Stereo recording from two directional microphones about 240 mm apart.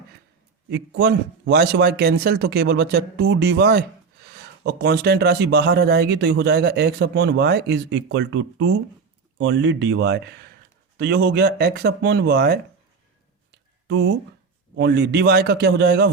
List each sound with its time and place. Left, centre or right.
0.7 s speech: right
13.8 s speech: right